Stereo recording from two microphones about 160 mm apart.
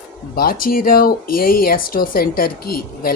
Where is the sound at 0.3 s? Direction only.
65° left (ahead or behind).